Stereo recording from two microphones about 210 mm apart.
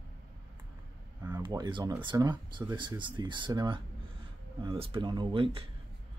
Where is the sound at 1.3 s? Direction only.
20° right (ahead or behind).